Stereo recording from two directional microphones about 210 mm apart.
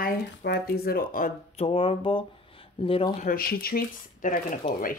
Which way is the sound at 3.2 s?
45° left (ahead or behind).